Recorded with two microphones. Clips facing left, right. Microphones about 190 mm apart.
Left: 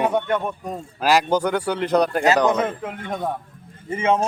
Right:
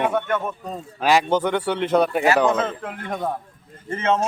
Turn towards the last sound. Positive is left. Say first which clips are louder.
# left 1 dB
turn(degrees=15)  # may be behind; listen again after turning